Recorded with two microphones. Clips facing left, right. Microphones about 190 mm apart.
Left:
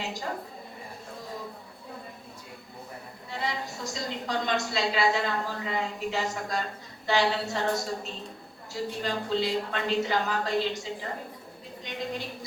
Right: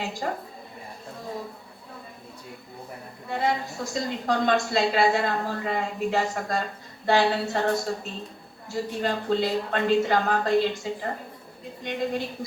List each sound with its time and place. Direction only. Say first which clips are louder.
0.0 s a woman's voice: right 4 dB; 55° right (ahead or behind)
3.2 s a woman's voice: right 7 dB; 55° right (ahead or behind)
8.7 s a woman's voice: right 4 dB; 50° right (ahead or behind)